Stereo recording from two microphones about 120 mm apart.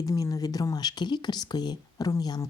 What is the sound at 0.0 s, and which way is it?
A woman's voice, 30° left (ahead or behind).